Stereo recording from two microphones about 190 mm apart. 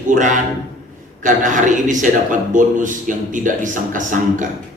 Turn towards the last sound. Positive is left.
turn(degrees=-40)  # may be behind; listen again after turning